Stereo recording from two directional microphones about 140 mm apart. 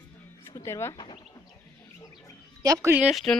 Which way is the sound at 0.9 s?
35° left (ahead or behind).